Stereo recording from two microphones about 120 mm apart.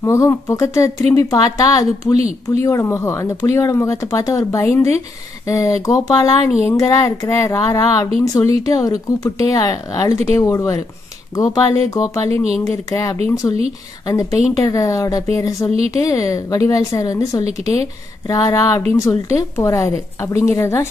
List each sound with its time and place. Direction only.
0.0 s speech: 25° left (ahead or behind)
13.4 s speech: 10° left (ahead or behind)
14.0 s speech: 30° left (ahead or behind)